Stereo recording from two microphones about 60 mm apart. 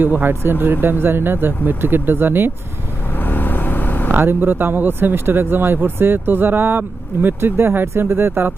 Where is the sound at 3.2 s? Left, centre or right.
Left.